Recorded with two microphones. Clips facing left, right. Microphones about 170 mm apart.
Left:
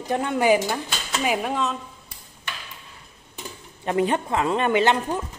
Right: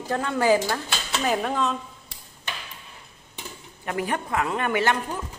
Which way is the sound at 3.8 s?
25° left (ahead or behind).